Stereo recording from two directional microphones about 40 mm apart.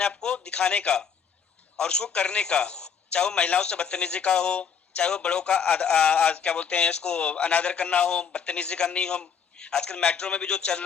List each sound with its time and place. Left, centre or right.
0.2 s speech: left
5.6 s speech: left